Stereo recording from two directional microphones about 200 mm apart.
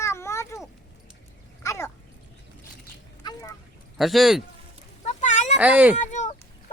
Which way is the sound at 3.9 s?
Centre (ahead or behind).